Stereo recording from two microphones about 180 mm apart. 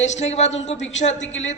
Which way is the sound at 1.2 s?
90° left.